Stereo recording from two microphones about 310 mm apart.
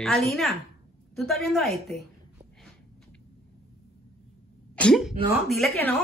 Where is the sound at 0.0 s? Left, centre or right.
Centre.